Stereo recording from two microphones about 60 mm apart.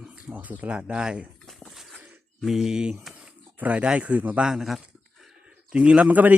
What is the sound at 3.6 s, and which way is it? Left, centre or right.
Speech, right.